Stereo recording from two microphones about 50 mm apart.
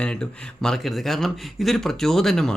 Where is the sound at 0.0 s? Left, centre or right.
Centre.